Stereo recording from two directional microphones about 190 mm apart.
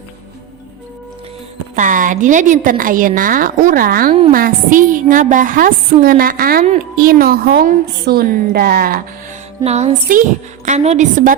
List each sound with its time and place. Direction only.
1.7 s a woman's voice: 45° right (ahead or behind)
9.6 s a woman's voice: 35° right (ahead or behind)